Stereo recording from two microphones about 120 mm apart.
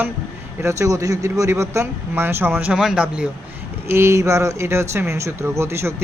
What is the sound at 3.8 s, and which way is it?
Speech, 20° right (ahead or behind).